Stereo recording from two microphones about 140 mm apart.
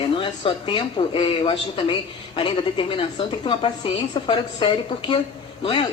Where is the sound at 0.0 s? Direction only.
40° left (ahead or behind).